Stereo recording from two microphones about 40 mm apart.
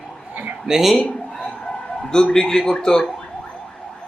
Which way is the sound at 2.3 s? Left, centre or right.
Centre.